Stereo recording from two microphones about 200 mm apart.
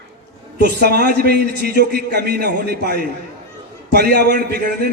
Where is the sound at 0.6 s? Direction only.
55° right (ahead or behind).